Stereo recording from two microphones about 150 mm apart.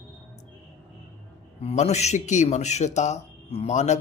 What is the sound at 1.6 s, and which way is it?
Speech, 45° left (ahead or behind).